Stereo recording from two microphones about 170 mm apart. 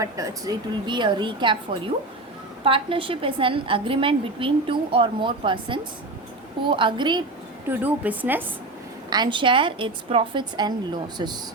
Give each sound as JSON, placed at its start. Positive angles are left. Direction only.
{"t": 0.0, "sound": "a woman's voice", "side_deg": -20}
{"t": 2.6, "sound": "a woman's voice", "side_deg": -30}
{"t": 7.7, "sound": "a woman's voice", "side_deg": -10}
{"t": 9.0, "sound": "a woman's voice", "side_deg": -25}